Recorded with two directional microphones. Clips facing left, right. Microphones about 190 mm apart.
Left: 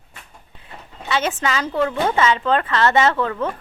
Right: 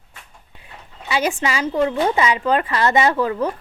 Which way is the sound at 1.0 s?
10° right (ahead or behind).